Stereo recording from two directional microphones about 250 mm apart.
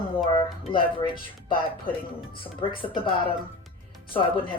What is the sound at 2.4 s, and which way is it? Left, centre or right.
Speech, left.